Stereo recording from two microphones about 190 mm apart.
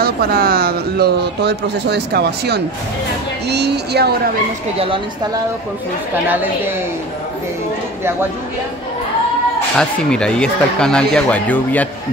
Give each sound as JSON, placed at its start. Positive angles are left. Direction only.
{"t": 0.0, "sound": "speech", "side_deg": -55}
{"t": 4.7, "sound": "speech", "side_deg": -25}
{"t": 9.8, "sound": "speech", "side_deg": 5}